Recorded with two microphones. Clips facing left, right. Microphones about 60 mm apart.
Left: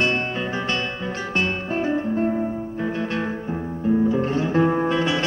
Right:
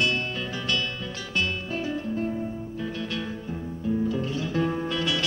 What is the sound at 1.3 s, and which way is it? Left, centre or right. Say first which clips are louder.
Music: left 4 dB; left.